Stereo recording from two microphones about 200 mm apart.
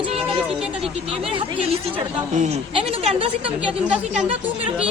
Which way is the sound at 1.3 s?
25° right (ahead or behind).